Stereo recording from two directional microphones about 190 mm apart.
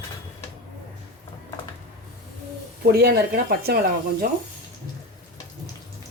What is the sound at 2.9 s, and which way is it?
Speech, 55° right (ahead or behind).